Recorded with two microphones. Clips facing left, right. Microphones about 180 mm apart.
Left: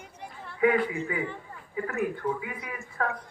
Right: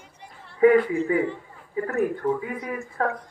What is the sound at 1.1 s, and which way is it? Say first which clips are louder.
A man's voice: right 9 dB; 40° right (ahead or behind).